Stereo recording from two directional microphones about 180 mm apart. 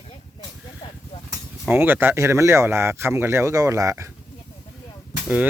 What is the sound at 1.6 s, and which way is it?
Speech, 10° right (ahead or behind).